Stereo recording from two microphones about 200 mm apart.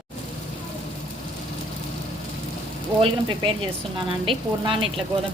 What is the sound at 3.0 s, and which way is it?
Frying, 25° right (ahead or behind).